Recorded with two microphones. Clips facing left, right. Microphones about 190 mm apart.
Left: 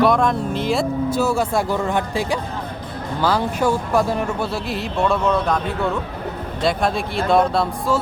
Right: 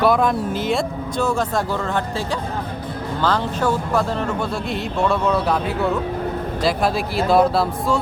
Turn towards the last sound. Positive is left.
turn(degrees=0)  # may be behind; listen again after turning